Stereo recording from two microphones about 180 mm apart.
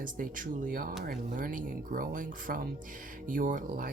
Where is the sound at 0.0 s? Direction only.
50° right (ahead or behind).